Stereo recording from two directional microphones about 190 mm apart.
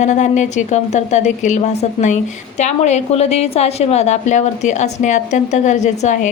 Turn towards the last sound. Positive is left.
turn(degrees=40)  # may be behind; listen again after turning